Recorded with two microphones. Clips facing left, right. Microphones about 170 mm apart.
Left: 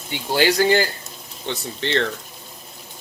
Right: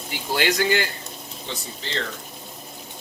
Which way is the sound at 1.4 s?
70° left (ahead or behind).